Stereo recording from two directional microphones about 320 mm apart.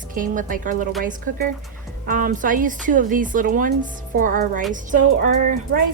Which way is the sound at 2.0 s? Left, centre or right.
Right.